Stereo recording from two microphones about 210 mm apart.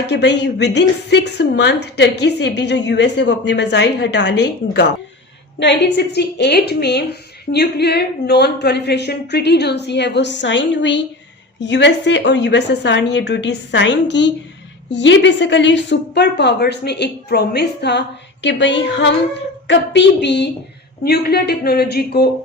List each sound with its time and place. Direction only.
0.1 s a woman's voice: 55° left (ahead or behind)